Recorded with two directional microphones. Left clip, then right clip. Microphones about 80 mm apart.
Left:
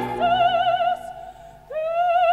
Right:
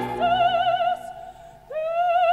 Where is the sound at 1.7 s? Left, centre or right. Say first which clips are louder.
Left 1 dB; right.